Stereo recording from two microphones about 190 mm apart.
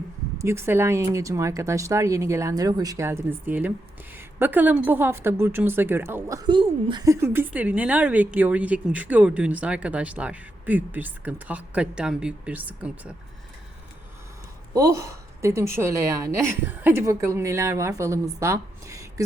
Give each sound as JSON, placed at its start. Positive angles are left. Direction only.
{"t": 0.3, "sound": "a woman's voice", "side_deg": -15}
{"t": 14.7, "sound": "a woman's voice", "side_deg": -15}